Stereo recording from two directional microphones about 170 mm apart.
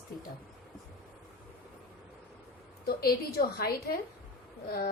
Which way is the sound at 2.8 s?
65° left (ahead or behind).